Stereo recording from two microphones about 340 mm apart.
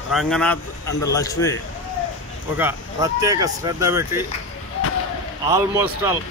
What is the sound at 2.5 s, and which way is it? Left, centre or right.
Speech, centre.